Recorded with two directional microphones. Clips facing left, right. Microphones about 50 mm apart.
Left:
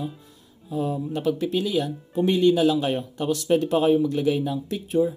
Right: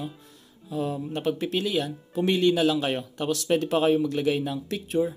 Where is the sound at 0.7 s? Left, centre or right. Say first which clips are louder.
Left 2 dB; right.